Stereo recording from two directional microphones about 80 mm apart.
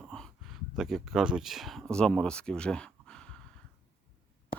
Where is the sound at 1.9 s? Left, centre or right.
Centre.